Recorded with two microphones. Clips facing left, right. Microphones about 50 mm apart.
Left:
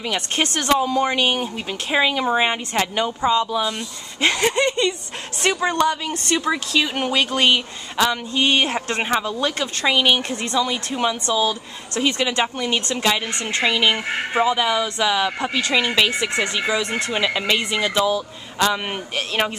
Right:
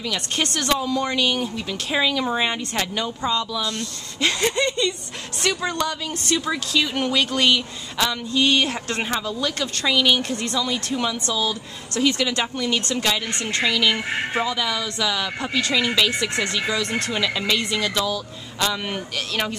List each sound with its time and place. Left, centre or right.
0.0 s speech: left
4.2 s speech: left